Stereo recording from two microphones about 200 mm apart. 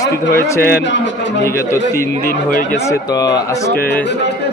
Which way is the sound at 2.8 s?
15° left (ahead or behind).